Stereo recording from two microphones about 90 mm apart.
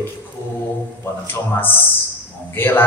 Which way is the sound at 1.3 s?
20° left (ahead or behind).